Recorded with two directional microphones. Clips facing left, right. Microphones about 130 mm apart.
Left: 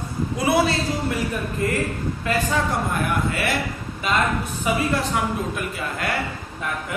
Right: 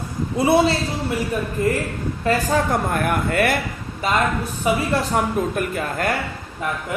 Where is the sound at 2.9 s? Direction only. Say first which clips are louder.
Right 3 dB; 50° right (ahead or behind).